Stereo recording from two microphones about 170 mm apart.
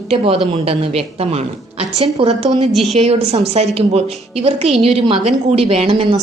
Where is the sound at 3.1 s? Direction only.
35° right (ahead or behind).